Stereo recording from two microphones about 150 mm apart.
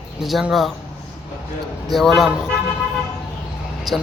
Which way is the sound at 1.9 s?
Centre (ahead or behind).